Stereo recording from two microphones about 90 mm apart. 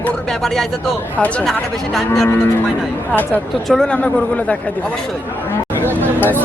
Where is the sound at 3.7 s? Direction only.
10° left (ahead or behind).